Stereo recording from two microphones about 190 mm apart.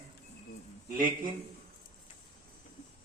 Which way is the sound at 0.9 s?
45° right (ahead or behind).